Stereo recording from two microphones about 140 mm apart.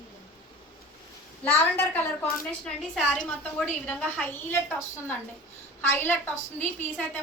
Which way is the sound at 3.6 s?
10° left (ahead or behind).